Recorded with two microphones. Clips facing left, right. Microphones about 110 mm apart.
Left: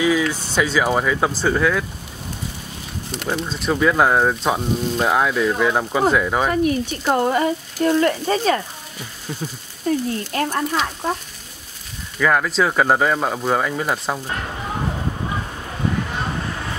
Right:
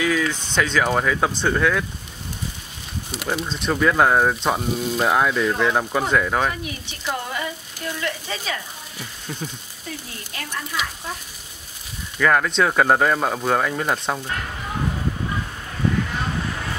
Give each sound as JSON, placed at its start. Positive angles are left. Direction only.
{"t": 0.0, "sound": "speech", "side_deg": 10}
{"t": 3.1, "sound": "speech", "side_deg": -5}
{"t": 6.5, "sound": "speech", "side_deg": 45}
{"t": 9.3, "sound": "speech", "side_deg": 5}
{"t": 9.9, "sound": "speech", "side_deg": 40}
{"t": 12.2, "sound": "speech", "side_deg": 5}